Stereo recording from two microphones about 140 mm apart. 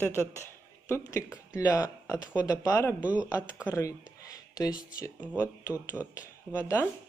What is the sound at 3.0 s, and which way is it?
Speech, 10° right (ahead or behind).